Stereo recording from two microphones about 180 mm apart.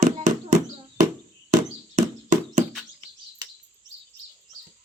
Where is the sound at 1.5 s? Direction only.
45° right (ahead or behind).